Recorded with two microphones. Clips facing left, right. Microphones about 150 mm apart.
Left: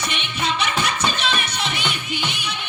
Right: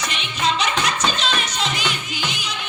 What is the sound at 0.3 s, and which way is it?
Music, 55° left (ahead or behind).